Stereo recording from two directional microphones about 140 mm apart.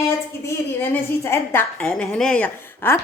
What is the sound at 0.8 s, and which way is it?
A woman's voice, 15° left (ahead or behind).